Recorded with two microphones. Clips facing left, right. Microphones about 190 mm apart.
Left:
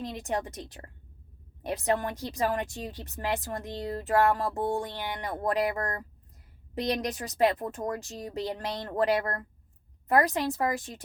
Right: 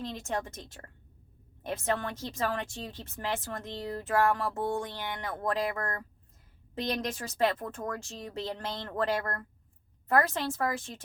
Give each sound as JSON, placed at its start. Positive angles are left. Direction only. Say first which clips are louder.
{"t": 0.0, "sound": "speech", "louder": "left 2 dB", "side_deg": 15}
{"t": 6.8, "sound": "speech", "louder": "left 3 dB", "side_deg": 15}